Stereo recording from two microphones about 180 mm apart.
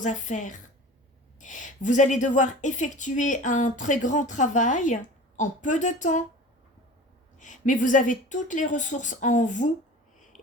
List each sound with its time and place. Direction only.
0.0 s a woman's voice: 40° left (ahead or behind)
7.3 s a woman's voice: 45° left (ahead or behind)